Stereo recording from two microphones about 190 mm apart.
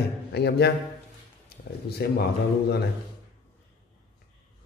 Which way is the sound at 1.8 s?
55° left (ahead or behind).